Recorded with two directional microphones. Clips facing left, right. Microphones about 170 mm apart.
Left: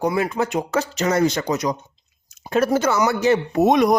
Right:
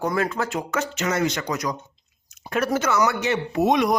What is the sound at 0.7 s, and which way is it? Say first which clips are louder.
Speech: left 4 dB; 35° left (ahead or behind).